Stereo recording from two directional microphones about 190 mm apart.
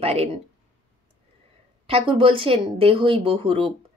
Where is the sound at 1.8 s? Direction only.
30° right (ahead or behind).